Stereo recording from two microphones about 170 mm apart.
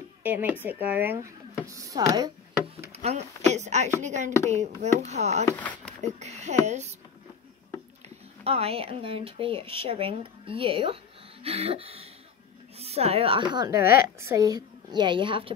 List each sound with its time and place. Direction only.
0.2 s speech: 10° right (ahead or behind)
2.9 s speech: 40° right (ahead or behind)
4.0 s a sound: 45° right (ahead or behind)
5.0 s speech: 40° right (ahead or behind)
5.5 s speech: 10° left (ahead or behind)
6.0 s speech: 40° right (ahead or behind)
8.5 s a woman's voice: 35° right (ahead or behind)